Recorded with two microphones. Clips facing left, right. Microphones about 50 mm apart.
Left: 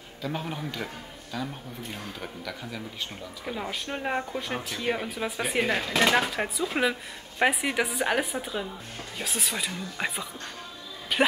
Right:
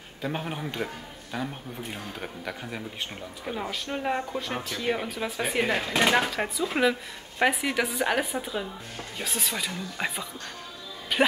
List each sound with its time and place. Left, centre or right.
0.2 s a man's voice: right
3.4 s speech: centre